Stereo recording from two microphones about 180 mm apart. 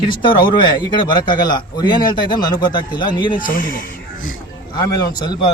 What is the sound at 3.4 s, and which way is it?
Speech, 50° left (ahead or behind).